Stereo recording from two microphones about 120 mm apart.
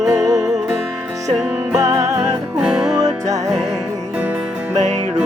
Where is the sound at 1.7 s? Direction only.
30° right (ahead or behind).